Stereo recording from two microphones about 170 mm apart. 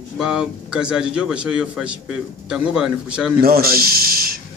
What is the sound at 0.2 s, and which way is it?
A man's voice, 5° right (ahead or behind).